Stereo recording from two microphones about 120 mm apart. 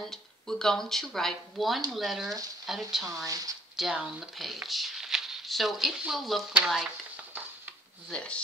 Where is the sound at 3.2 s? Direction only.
30° right (ahead or behind).